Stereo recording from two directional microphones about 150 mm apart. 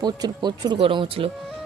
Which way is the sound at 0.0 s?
25° right (ahead or behind).